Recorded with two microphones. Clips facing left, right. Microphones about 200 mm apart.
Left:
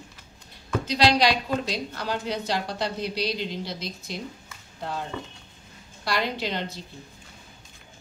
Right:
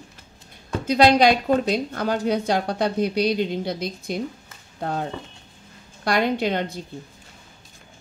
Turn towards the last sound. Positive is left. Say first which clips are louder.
# right 7 dB
turn(degrees=-55)  # may be behind; listen again after turning